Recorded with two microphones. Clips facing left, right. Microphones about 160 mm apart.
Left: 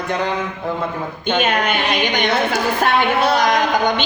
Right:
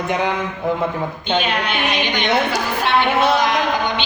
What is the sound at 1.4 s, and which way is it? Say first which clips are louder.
A woman's voice: left 3 dB; 45° left (ahead or behind).